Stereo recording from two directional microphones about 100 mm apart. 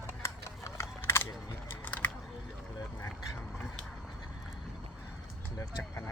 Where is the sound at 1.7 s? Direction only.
15° left (ahead or behind).